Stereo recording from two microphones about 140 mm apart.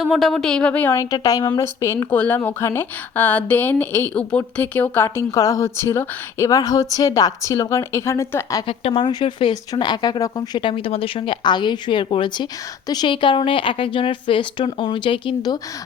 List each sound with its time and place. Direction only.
0.0 s a woman's voice: centre (ahead or behind)
0.9 s speech: 25° left (ahead or behind)
8.6 s speech: 40° left (ahead or behind)